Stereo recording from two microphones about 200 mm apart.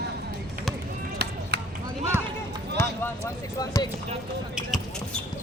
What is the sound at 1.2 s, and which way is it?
Chop, 55° right (ahead or behind).